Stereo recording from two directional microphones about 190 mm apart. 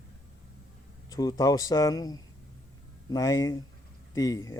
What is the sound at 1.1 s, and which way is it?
Speech, 20° left (ahead or behind).